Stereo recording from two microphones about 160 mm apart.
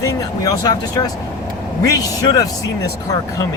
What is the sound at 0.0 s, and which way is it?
Speech, 20° left (ahead or behind).